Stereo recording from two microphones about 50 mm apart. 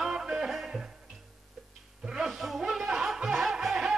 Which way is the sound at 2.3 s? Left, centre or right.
Centre.